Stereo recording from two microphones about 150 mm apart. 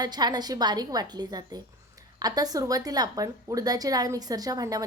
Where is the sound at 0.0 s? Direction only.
25° right (ahead or behind).